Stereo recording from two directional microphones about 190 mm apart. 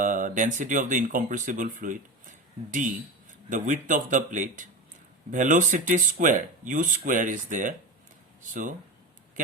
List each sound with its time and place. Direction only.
0.0 s speech: 45° right (ahead or behind)